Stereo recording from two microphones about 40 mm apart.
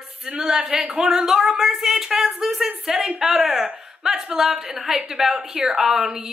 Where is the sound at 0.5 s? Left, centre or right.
Right.